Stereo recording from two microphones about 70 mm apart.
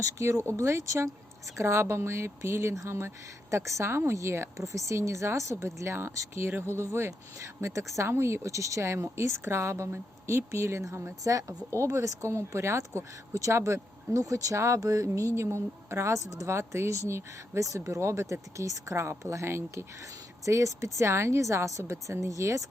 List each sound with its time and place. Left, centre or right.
0.0 s a woman's voice: right
11.2 s a woman's voice: right